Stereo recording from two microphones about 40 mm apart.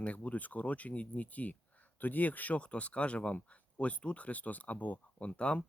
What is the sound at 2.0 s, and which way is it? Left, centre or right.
Speech, left.